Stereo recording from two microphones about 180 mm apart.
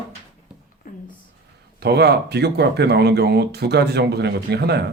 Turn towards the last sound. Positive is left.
turn(degrees=-65)  # may be behind; listen again after turning